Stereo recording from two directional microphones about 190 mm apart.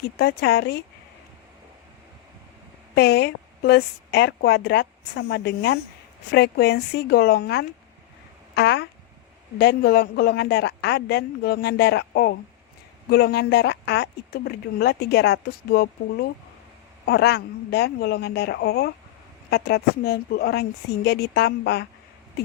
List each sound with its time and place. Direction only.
0.2 s a woman's voice: 55° left (ahead or behind)
2.9 s a woman's voice: 60° left (ahead or behind)